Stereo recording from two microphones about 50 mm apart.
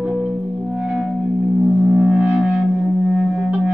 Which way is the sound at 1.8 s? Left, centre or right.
Centre.